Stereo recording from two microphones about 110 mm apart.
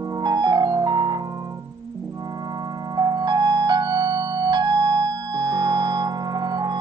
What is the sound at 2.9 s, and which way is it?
Music, 40° right (ahead or behind).